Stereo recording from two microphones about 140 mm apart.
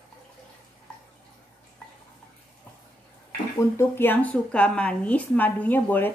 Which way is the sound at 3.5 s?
20° left (ahead or behind).